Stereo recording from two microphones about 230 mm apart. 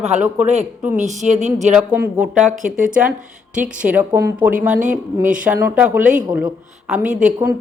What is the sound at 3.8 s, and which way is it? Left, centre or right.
Speech, centre.